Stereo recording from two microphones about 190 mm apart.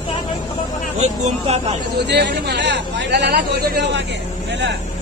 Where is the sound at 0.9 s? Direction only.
35° right (ahead or behind).